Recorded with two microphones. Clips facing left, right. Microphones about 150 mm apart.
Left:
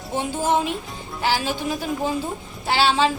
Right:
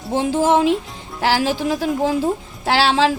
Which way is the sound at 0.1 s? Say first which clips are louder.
Right 6 dB; 90° right.